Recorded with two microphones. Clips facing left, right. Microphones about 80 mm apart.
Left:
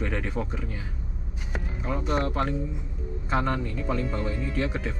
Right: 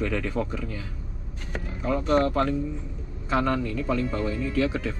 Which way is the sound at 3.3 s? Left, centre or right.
Left.